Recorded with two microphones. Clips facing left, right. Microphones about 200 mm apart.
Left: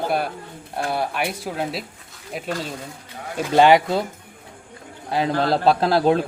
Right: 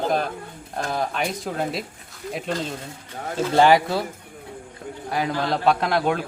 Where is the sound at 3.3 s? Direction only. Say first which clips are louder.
Left 2 dB; 20° left (ahead or behind).